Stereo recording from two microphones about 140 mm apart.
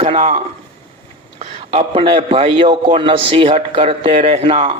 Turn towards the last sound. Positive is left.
turn(degrees=-45)  # may be behind; listen again after turning